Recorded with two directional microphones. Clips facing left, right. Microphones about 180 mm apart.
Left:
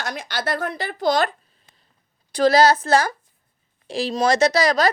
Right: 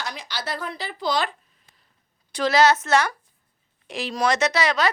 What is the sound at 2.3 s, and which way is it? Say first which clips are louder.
Speech: left 3 dB; 35° left (ahead or behind).